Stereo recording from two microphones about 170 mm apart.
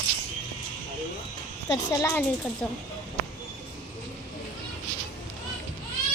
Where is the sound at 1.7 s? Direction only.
20° left (ahead or behind).